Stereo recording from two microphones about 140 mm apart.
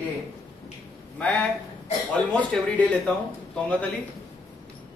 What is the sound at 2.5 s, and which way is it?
Speech, 10° left (ahead or behind).